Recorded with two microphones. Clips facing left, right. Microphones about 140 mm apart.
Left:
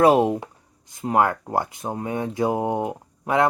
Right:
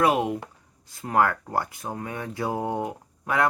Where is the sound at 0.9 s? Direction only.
20° left (ahead or behind).